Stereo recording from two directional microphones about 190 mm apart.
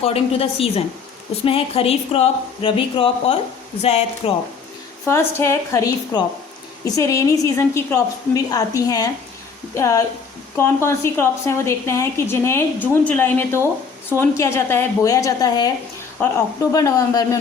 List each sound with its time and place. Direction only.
0.0 s a woman's voice: 30° left (ahead or behind)
5.0 s a woman's voice: 10° left (ahead or behind)